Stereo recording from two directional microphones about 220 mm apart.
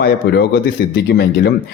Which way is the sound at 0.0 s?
45° left (ahead or behind).